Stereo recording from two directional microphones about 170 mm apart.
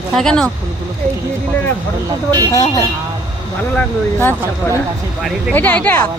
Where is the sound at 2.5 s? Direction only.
20° left (ahead or behind).